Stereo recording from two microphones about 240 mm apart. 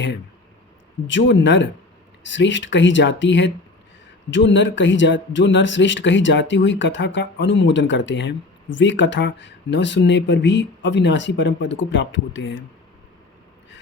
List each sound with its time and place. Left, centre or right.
1.0 s speech: left